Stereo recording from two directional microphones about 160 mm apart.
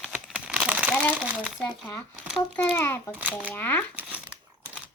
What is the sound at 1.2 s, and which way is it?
Speech, centre (ahead or behind).